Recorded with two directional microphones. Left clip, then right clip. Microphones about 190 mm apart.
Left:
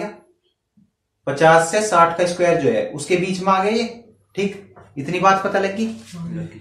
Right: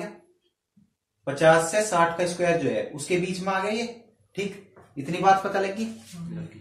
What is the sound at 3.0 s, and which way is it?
Speech, centre (ahead or behind).